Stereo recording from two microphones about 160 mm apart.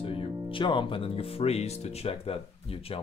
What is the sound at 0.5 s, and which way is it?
Speech, 30° left (ahead or behind).